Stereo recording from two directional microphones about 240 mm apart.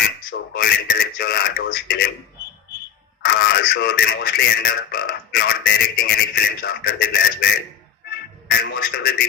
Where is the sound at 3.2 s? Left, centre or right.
Left.